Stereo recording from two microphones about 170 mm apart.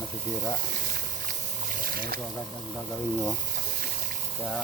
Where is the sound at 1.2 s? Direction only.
55° right (ahead or behind).